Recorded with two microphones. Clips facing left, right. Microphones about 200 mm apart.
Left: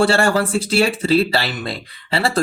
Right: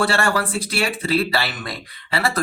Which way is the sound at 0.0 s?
25° left (ahead or behind).